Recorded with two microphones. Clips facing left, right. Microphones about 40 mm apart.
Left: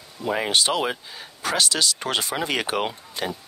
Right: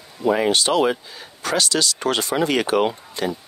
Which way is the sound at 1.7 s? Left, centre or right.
Left.